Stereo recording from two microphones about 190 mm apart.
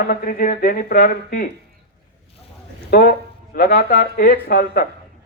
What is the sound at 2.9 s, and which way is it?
Speech, 50° left (ahead or behind).